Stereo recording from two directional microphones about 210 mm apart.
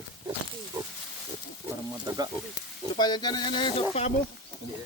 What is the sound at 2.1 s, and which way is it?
Speech, 20° right (ahead or behind).